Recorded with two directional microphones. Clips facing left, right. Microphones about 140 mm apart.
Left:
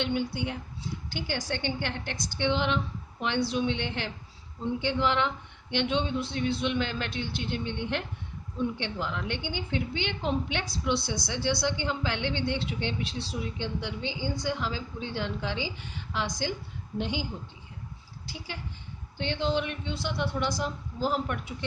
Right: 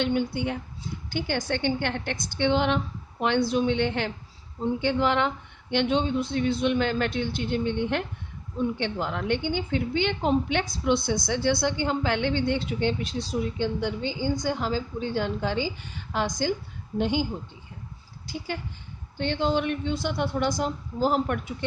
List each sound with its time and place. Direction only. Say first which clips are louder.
0.0 s a woman's voice: right 4 dB; 50° right (ahead or behind)
18.3 s a woman's voice: right 7 dB; 50° right (ahead or behind)